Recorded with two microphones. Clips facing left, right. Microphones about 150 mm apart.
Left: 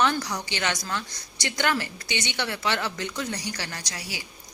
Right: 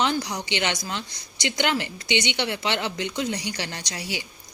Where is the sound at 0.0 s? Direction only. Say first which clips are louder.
Even; 20° right (ahead or behind).